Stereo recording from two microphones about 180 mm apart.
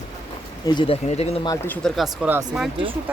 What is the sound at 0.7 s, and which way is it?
Speech, 25° left (ahead or behind).